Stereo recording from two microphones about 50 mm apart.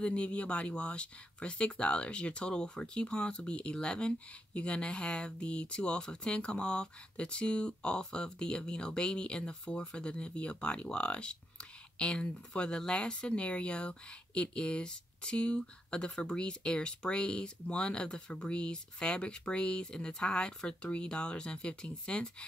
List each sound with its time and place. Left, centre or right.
0.0 s speech: left